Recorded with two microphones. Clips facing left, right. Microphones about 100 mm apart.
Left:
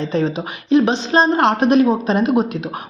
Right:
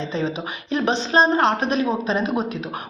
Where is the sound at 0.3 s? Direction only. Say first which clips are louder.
Left 9 dB; 35° left (ahead or behind).